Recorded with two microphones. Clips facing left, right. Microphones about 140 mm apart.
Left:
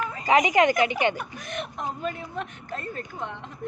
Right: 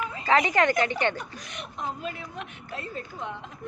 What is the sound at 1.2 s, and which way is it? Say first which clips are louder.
Speech: left 6 dB; 55° left (ahead or behind).